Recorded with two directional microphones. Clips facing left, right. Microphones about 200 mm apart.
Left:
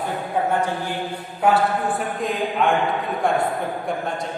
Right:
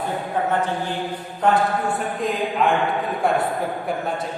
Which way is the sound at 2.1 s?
Centre (ahead or behind).